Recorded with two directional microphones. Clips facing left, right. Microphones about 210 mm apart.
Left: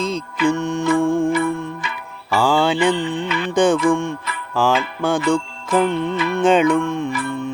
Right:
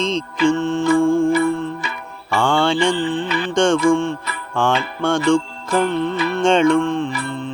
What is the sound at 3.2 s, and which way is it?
Music, 35° right (ahead or behind).